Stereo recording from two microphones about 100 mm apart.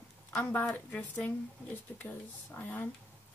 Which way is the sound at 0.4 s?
20° left (ahead or behind).